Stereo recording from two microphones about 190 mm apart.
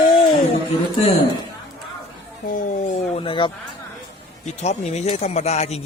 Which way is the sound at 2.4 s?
45° left (ahead or behind).